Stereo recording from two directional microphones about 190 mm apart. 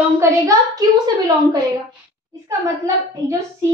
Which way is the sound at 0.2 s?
20° right (ahead or behind).